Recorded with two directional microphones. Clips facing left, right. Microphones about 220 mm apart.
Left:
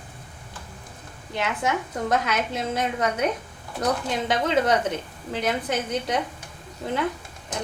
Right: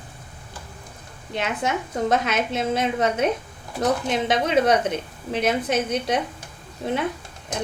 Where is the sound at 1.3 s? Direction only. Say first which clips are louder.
Right 1 dB; 20° right (ahead or behind).